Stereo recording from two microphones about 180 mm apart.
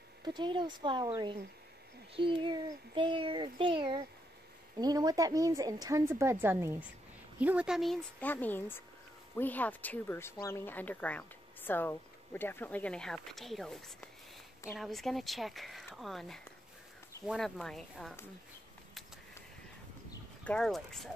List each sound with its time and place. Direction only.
0.2 s a woman's voice: 25° right (ahead or behind); by 18.1 s centre (ahead or behind)
20.4 s speech: 5° left (ahead or behind)